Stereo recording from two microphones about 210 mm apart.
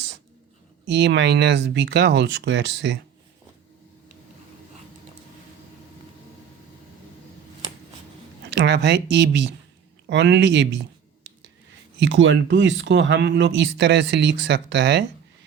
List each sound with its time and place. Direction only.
0.9 s speech: 55° right (ahead or behind)
8.5 s speech: 55° right (ahead or behind)
11.9 s speech: 60° right (ahead or behind)